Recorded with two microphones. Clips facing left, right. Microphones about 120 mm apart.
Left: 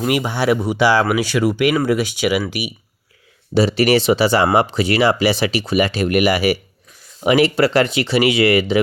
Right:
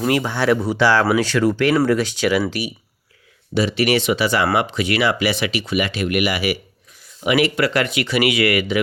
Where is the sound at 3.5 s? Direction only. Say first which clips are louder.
Left 4 dB; 35° left (ahead or behind).